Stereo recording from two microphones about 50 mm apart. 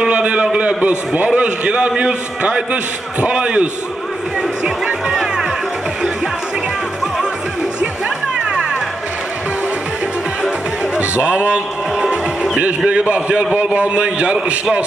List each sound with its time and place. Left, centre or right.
0.0 s a man's voice: right
5.1 s music: centre
8.4 s music: centre
11.0 s a man's voice: right
12.0 s music: centre
12.6 s a man's voice: right